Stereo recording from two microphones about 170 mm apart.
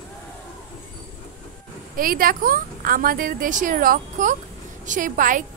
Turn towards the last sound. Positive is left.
turn(degrees=-50)  # may be behind; listen again after turning